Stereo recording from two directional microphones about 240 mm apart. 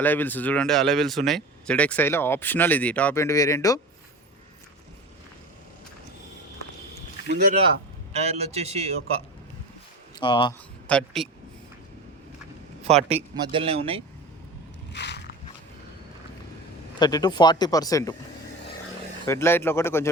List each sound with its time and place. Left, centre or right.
0.0 s speech: centre
7.3 s speech: right
8.2 s speech: right
10.2 s speech: centre
10.8 s a man's voice: centre
12.8 s a man's voice: right
14.9 s a sound: left
17.0 s speech: centre
19.2 s speech: centre